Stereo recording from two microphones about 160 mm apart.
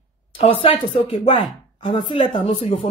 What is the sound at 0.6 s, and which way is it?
Speech, 35° left (ahead or behind).